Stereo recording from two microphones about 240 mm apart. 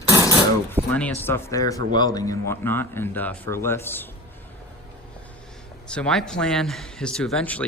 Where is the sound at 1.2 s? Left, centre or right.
Centre.